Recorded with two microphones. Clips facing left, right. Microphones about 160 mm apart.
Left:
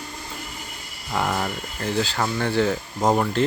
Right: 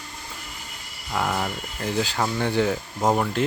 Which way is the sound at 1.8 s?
15° right (ahead or behind).